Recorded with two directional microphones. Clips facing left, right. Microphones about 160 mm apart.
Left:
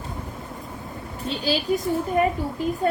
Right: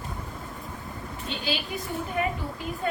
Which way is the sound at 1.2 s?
35° left (ahead or behind).